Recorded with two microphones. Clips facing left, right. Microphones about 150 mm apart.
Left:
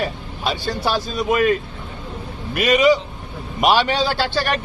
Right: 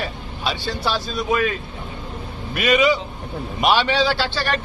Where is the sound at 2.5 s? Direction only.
40° left (ahead or behind).